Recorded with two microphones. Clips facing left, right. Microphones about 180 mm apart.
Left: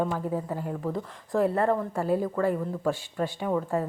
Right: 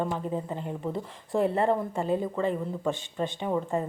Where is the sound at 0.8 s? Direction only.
30° right (ahead or behind).